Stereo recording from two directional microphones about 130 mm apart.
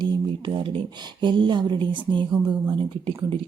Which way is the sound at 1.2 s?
35° right (ahead or behind).